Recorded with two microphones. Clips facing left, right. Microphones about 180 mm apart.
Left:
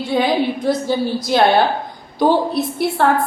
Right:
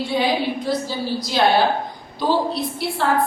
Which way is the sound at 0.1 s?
50° left (ahead or behind).